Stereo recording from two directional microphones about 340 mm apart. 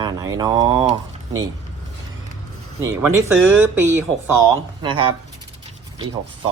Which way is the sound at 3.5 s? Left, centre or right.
Right.